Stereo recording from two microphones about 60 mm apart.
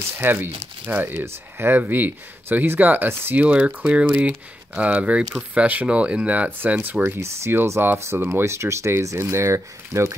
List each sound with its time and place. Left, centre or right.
0.2 s speech: right
1.2 s speech: right
1.8 s speech: right
3.3 s speech: right
7.2 s speech: right
8.4 s speech: right